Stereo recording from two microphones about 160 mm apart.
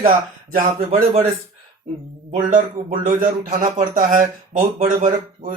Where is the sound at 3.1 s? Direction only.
55° right (ahead or behind).